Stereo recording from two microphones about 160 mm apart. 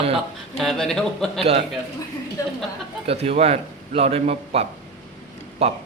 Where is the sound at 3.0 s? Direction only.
40° right (ahead or behind).